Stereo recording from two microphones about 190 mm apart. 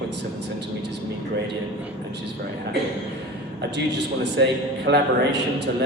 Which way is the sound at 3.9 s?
65° right (ahead or behind).